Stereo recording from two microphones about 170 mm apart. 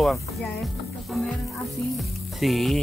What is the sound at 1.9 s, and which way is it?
Music, centre (ahead or behind).